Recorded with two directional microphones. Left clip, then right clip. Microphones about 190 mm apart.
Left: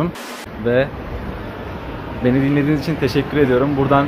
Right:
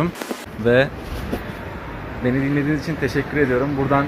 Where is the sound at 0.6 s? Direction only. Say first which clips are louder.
Right 1 dB; 50° right (ahead or behind).